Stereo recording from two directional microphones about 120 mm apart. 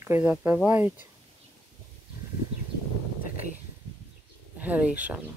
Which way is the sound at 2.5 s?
5° right (ahead or behind).